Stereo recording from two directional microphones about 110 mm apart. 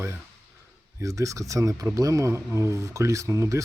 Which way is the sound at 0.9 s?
30° right (ahead or behind).